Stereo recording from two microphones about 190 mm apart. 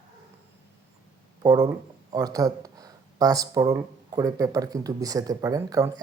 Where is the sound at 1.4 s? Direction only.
20° right (ahead or behind).